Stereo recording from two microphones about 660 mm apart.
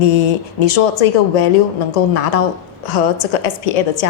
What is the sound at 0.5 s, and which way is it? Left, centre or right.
A woman's voice, left.